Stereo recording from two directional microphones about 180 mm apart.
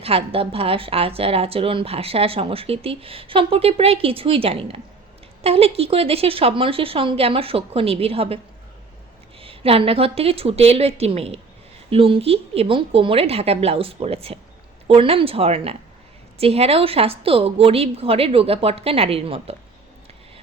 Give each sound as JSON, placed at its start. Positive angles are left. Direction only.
{"t": 0.0, "sound": "a woman's voice", "side_deg": -30}
{"t": 9.4, "sound": "a woman's voice", "side_deg": -30}